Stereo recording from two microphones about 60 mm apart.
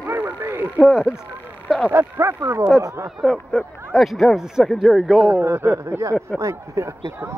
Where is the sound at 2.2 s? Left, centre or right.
Right.